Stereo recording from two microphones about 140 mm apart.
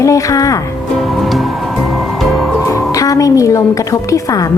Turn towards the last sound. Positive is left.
turn(degrees=25)  # may be behind; listen again after turning